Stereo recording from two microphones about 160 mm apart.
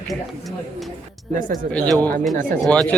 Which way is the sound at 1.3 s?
55° right (ahead or behind).